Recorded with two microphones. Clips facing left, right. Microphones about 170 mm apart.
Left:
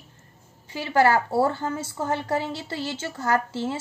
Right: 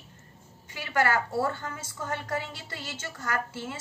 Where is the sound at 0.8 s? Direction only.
30° left (ahead or behind).